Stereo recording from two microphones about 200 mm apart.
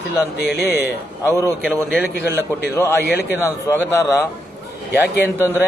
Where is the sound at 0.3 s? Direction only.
55° left (ahead or behind).